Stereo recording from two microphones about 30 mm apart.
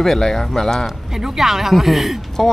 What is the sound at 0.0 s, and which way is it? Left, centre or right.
Speech, centre.